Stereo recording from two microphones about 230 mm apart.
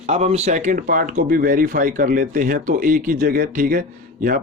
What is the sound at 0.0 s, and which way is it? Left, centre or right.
Speech, right.